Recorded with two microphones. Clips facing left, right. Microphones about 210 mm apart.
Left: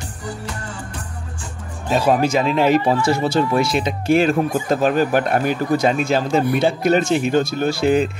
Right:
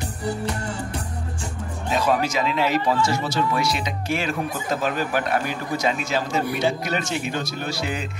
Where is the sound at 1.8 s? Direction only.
55° left (ahead or behind).